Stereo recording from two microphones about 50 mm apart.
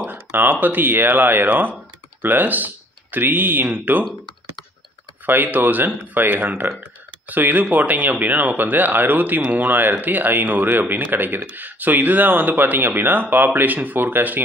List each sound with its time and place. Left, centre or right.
0.0 s speech: right
5.2 s speech: right
6.8 s a sound: right
7.7 s speech: right